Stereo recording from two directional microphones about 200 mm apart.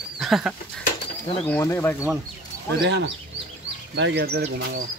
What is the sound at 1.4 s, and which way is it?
Speech, 10° left (ahead or behind).